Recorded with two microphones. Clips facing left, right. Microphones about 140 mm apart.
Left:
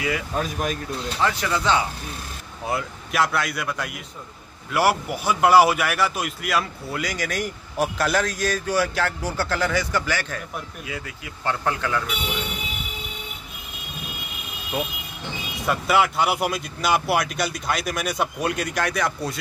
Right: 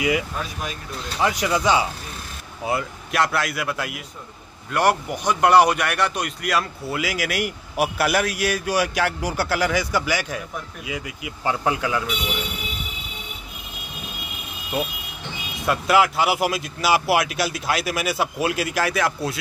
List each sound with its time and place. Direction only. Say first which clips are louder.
0.4 s speech: left 5 dB; 45° left (ahead or behind)
1.2 s a man's voice: right 3 dB; 15° right (ahead or behind)
2.6 s a man's voice: right 2 dB; centre (ahead or behind)
15.6 s speech: right 2 dB; centre (ahead or behind)